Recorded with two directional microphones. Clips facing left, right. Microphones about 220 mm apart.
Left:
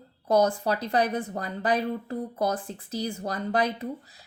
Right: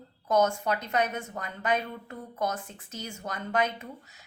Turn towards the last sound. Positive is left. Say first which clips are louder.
# left 8 dB
turn(degrees=35)  # may be behind; listen again after turning